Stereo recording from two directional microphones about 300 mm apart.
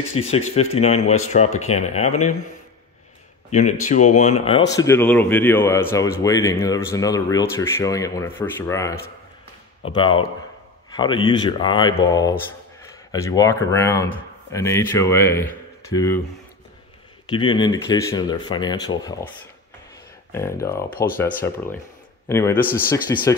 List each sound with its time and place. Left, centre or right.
0.1 s speech: centre
3.4 s speech: left
17.3 s speech: centre
20.3 s speech: centre